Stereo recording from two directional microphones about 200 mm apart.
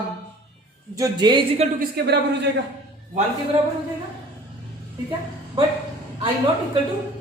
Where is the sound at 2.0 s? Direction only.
50° right (ahead or behind).